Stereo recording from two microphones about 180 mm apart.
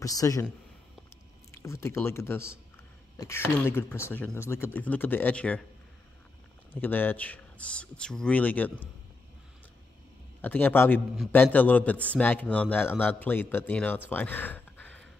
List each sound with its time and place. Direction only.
0.0 s a man's voice: 20° left (ahead or behind)
1.5 s a man's voice: 15° left (ahead or behind)
6.7 s a man's voice: 10° left (ahead or behind)
10.4 s a man's voice: 10° left (ahead or behind)
14.1 s a sound: 10° left (ahead or behind)